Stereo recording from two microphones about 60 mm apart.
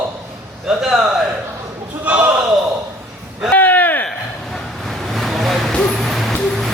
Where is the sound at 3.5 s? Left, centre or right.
Left.